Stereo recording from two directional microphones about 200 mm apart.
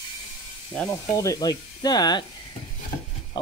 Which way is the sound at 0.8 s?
15° left (ahead or behind).